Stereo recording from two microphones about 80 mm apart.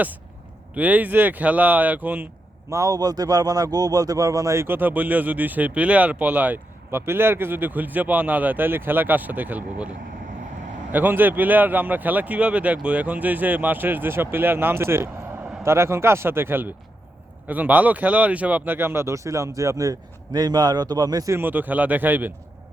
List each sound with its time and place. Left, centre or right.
0.7 s a man's voice: centre
2.6 s a man's voice: right; by 6.6 s centre
6.9 s a man's voice: right
10.9 s a man's voice: right
21.2 s a man's voice: right